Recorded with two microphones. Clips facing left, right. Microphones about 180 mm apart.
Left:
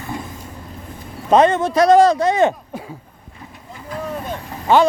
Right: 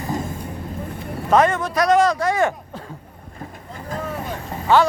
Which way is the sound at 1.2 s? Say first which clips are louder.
Left 3 dB; 20° left (ahead or behind).